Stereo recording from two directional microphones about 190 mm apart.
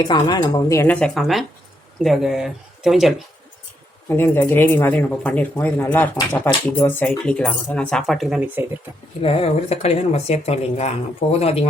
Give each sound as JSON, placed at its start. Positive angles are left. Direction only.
{"t": 0.0, "sound": "speech", "side_deg": 20}
{"t": 4.1, "sound": "speech", "side_deg": 10}
{"t": 9.2, "sound": "a woman's voice", "side_deg": 30}